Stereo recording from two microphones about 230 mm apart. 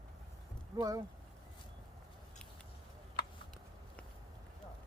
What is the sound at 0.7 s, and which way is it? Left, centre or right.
Speech, centre.